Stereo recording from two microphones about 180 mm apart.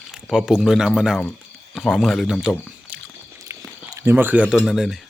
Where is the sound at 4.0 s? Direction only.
10° right (ahead or behind).